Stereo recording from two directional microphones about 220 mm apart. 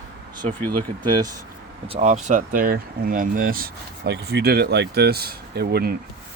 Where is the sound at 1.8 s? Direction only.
30° right (ahead or behind); by 5.9 s 45° right (ahead or behind).